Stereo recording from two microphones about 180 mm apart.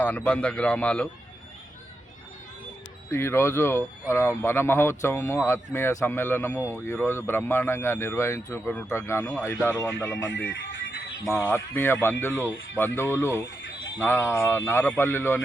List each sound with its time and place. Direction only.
0.0 s speech: 5° left (ahead or behind)
3.1 s speech: 15° left (ahead or behind)
10.2 s speech: 90° left
11.3 s speech: 15° left (ahead or behind)
13.6 s a sound: 90° left
14.0 s speech: 15° left (ahead or behind)